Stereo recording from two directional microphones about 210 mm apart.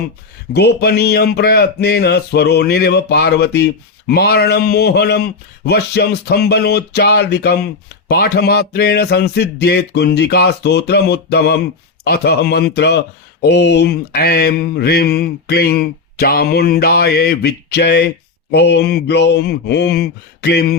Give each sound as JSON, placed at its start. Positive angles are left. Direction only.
{"t": 0.5, "sound": "mantra", "side_deg": 50}